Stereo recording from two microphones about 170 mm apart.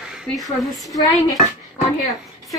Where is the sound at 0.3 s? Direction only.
Centre (ahead or behind).